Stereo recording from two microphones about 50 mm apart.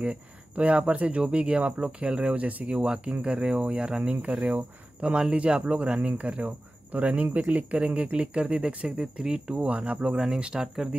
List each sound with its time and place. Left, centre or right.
0.0 s speech: right
9.7 s speech: right